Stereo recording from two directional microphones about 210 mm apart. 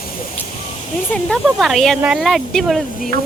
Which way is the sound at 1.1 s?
Centre (ahead or behind).